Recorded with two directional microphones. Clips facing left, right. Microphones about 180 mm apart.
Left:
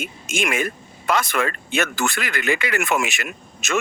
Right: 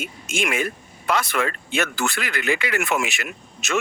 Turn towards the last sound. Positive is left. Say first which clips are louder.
# left 1 dB
turn(degrees=45)  # may be behind; listen again after turning